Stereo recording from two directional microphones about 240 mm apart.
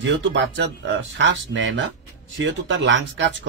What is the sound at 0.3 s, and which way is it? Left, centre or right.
Speech, right.